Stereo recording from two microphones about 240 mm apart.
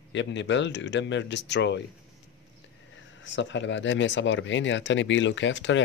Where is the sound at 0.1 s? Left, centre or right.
Left.